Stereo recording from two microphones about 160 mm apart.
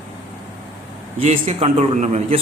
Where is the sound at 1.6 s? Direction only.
45° right (ahead or behind).